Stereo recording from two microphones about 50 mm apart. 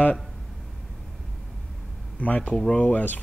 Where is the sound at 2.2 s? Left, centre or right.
Left.